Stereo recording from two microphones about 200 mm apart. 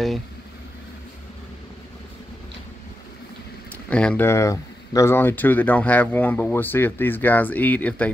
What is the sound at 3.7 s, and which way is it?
Speech, 5° left (ahead or behind).